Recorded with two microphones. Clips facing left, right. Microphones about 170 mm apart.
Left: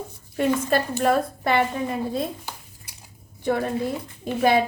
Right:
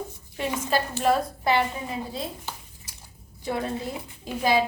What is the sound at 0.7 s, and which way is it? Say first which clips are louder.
Speech: left 2 dB; 50° left (ahead or behind).